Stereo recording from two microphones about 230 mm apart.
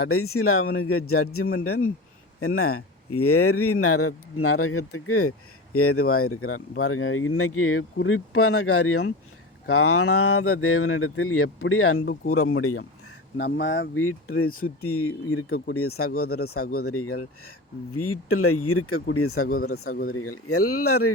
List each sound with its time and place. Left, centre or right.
0.0 s speech: left
13.4 s speech: left
19.9 s speech: left
20.1 s speech: left